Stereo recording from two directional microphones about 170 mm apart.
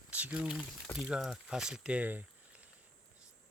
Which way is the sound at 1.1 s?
5° right (ahead or behind).